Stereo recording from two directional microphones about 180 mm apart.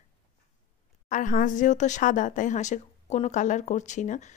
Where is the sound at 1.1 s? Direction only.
45° left (ahead or behind).